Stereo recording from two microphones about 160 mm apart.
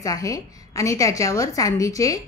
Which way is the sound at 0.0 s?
20° left (ahead or behind).